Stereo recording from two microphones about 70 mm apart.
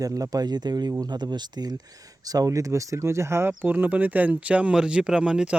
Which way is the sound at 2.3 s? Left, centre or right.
Right.